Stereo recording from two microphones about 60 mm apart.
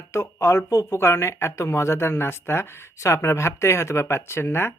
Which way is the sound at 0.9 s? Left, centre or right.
Left.